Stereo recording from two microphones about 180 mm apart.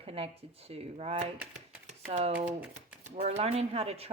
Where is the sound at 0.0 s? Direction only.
30° right (ahead or behind).